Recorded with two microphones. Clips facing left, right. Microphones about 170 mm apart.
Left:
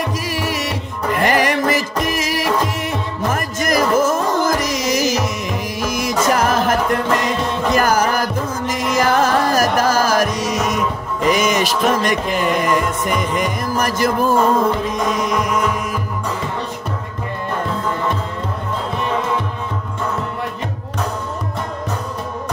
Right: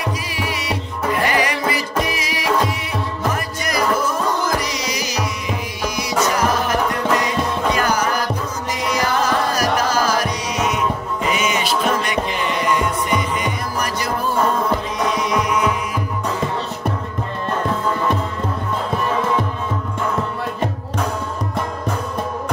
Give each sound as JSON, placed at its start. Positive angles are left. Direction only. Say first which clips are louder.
{"t": 0.3, "sound": "music", "louder": "left 2 dB", "side_deg": 45}